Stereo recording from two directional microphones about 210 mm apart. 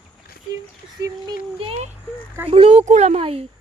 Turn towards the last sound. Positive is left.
turn(degrees=-30)  # may be behind; listen again after turning